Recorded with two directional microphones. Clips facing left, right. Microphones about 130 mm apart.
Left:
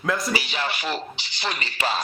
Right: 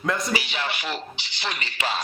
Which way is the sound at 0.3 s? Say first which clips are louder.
Left 1 dB; 40° left (ahead or behind).